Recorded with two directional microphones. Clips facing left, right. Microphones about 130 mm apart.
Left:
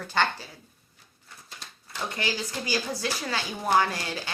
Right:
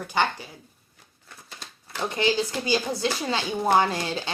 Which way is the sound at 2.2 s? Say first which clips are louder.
Right 9 dB; 25° right (ahead or behind).